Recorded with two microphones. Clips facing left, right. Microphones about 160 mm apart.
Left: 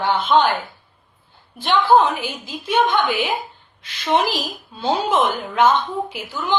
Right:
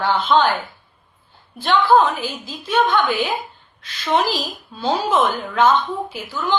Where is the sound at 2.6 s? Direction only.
15° left (ahead or behind).